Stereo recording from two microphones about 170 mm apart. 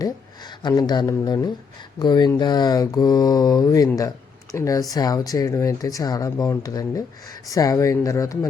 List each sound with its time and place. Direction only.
0.7 s speech: 25° left (ahead or behind)